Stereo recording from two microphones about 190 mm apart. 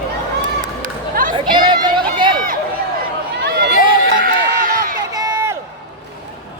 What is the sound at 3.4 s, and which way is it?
Run, 55° right (ahead or behind).